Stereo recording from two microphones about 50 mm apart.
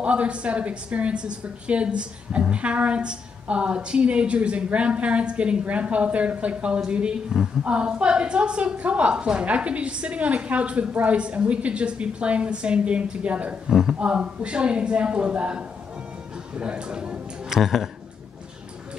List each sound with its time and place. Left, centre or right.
0.0 s a woman's voice: right
13.7 s a man's voice: centre
13.9 s a woman's voice: right
17.5 s speech: centre